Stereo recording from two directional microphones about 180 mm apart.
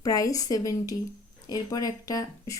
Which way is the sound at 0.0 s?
20° left (ahead or behind).